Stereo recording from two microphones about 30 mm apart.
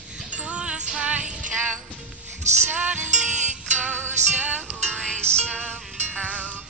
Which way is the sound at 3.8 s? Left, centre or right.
Right.